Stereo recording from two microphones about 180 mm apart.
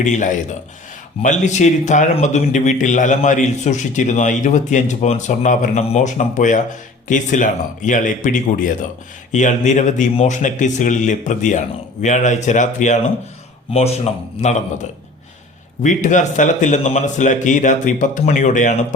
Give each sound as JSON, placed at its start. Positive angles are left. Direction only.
{"t": 0.0, "sound": "a man's voice", "side_deg": 45}
{"t": 15.8, "sound": "a man's voice", "side_deg": 45}